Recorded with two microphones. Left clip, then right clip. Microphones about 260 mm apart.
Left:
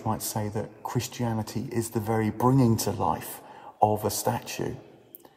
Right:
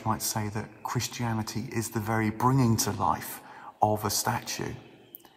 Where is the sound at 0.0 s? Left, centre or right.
Right.